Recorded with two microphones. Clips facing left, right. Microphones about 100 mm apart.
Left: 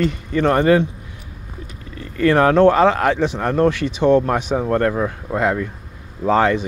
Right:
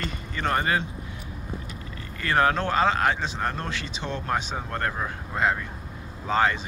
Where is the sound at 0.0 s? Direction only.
75° left (ahead or behind).